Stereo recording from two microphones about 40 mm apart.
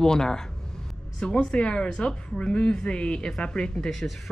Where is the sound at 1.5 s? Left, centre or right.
Left.